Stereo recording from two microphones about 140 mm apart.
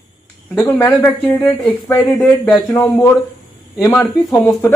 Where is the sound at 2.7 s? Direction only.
20° left (ahead or behind).